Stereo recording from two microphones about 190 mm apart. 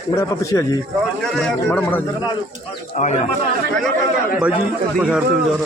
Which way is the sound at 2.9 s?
40° left (ahead or behind).